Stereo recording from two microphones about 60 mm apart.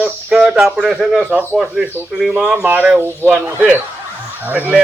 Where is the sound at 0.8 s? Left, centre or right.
Centre.